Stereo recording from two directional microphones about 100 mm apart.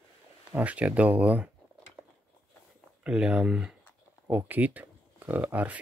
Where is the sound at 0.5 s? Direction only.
15° right (ahead or behind).